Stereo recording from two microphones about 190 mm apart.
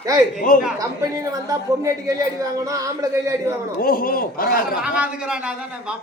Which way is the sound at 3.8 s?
50° left (ahead or behind).